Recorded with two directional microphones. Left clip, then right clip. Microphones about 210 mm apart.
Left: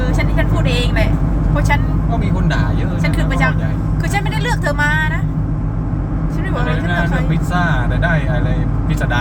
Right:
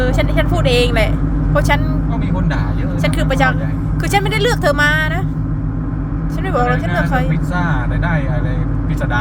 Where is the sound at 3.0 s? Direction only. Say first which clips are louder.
Right 3 dB; 55° right (ahead or behind).